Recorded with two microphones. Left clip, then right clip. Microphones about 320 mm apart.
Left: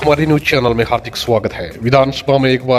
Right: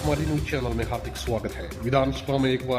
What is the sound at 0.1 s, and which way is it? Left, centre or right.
A man's voice, left.